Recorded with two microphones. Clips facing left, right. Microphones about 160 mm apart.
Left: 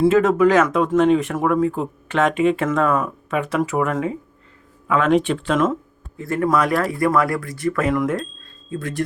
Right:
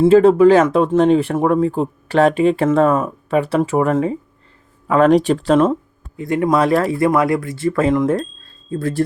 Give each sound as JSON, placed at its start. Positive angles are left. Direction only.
{"t": 0.0, "sound": "speech", "side_deg": -30}
{"t": 6.1, "sound": "speech", "side_deg": -20}